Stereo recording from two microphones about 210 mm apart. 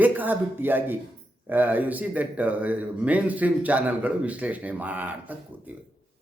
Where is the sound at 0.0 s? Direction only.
10° right (ahead or behind).